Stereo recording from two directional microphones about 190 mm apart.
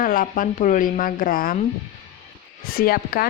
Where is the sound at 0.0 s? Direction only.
45° left (ahead or behind).